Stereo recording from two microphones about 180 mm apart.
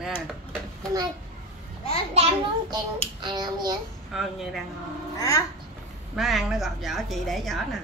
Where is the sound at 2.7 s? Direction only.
25° right (ahead or behind).